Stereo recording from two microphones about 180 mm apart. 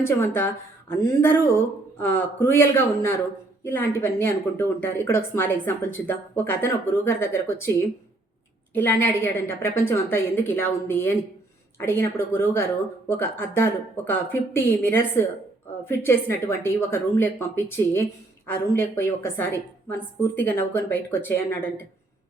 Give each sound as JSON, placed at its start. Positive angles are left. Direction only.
{"t": 0.0, "sound": "speech", "side_deg": 10}
{"t": 8.7, "sound": "speech", "side_deg": 10}